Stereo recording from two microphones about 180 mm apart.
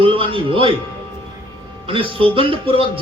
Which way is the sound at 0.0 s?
30° right (ahead or behind).